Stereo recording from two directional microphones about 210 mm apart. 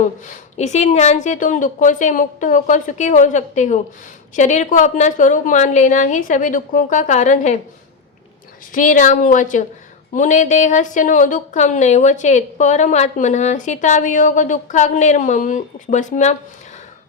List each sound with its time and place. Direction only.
0.0 s speech: 35° left (ahead or behind)
8.7 s speech: 40° left (ahead or behind)